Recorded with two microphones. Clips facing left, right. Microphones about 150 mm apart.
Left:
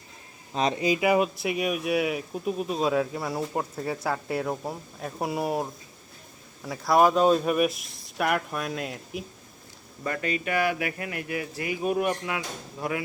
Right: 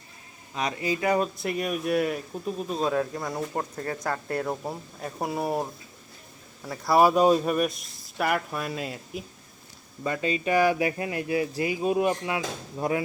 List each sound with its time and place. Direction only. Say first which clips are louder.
0.5 s speech: left 4 dB; 25° left (ahead or behind)
0.9 s speech: left 1 dB; 10° left (ahead or behind); by 7.4 s 10° right (ahead or behind)
7.4 s speech: left 1 dB; 5° left (ahead or behind)
10.0 s speech: right 2 dB; 20° right (ahead or behind)